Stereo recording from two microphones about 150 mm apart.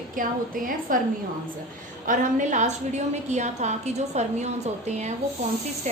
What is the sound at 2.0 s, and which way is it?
A woman's voice, 60° right (ahead or behind).